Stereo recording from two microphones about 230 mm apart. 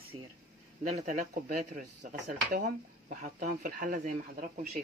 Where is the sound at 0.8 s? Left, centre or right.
Right.